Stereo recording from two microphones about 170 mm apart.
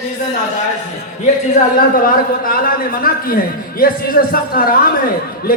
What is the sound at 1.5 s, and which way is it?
A man's voice, 55° left (ahead or behind).